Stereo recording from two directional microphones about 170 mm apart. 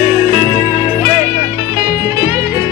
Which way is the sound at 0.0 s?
25° right (ahead or behind).